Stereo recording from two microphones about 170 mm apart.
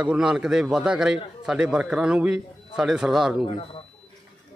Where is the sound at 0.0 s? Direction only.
5° right (ahead or behind).